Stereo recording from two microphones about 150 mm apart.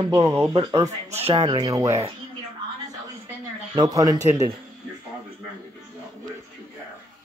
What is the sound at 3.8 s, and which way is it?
Speech, 25° right (ahead or behind).